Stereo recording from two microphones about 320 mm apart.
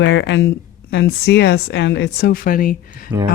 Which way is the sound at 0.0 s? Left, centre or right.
Left.